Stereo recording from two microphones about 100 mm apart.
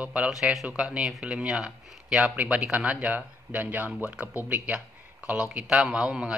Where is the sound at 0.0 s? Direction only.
15° right (ahead or behind).